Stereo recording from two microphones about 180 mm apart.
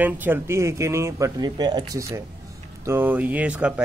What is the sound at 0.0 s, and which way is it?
A man's voice, 10° right (ahead or behind).